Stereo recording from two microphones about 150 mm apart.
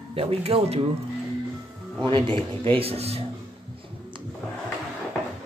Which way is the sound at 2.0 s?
30° right (ahead or behind).